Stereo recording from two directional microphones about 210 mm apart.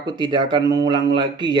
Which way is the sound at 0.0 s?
20° right (ahead or behind).